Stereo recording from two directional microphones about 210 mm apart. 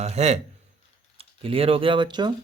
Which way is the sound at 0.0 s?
30° right (ahead or behind).